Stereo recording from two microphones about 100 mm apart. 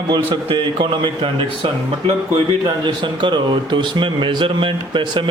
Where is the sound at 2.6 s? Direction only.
50° right (ahead or behind).